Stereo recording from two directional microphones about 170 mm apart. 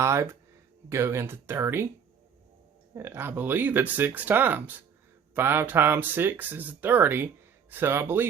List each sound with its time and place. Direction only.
0.0 s speech: 15° right (ahead or behind)
2.9 s speech: 15° right (ahead or behind)